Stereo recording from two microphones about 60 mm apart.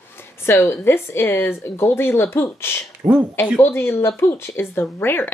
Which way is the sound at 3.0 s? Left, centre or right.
Right.